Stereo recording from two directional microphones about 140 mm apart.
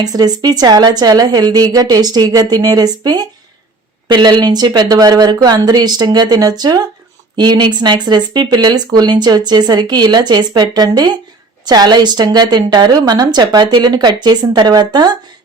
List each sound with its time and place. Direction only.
0.0 s a woman's voice: 30° right (ahead or behind)